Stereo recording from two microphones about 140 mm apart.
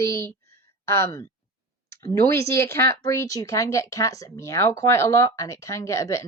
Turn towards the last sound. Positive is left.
turn(degrees=20)  # may be behind; listen again after turning